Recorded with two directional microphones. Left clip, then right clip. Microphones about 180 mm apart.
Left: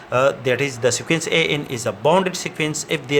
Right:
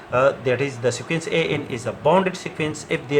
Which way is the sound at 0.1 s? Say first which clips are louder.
Left 1 dB; 55° left (ahead or behind).